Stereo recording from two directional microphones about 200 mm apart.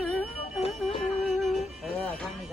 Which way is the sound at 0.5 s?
30° left (ahead or behind).